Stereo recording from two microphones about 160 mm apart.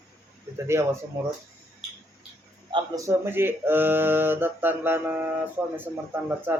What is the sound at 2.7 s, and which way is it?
Speech, 20° right (ahead or behind).